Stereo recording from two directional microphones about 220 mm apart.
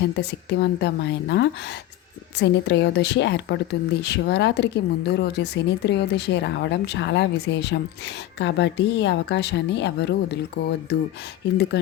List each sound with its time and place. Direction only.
0.0 s a woman's voice: 50° left (ahead or behind)